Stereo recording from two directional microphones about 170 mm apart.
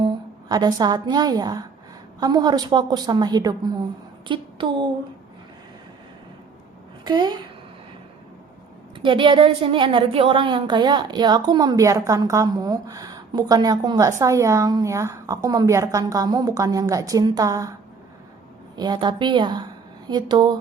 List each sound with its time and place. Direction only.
0.0 s a woman's voice: 25° right (ahead or behind)
7.0 s a woman's voice: 25° right (ahead or behind)
9.0 s a woman's voice: 30° right (ahead or behind)
18.8 s a woman's voice: 25° right (ahead or behind)